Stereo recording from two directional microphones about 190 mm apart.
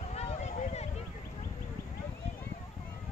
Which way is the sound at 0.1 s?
35° left (ahead or behind).